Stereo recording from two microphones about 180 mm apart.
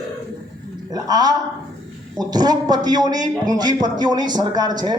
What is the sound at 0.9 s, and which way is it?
A man's voice, 20° right (ahead or behind).